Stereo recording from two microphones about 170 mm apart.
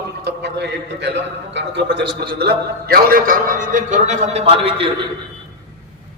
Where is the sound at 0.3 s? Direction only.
85° right.